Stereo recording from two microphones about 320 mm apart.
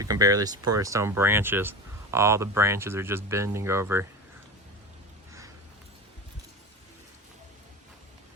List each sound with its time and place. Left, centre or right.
0.0 s speech: centre